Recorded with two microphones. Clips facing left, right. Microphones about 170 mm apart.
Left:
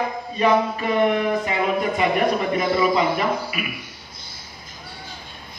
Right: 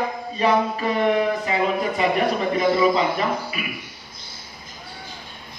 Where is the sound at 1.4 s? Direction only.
35° right (ahead or behind).